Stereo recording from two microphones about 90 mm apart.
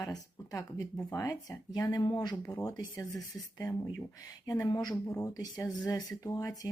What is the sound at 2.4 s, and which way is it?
Speech, 40° left (ahead or behind).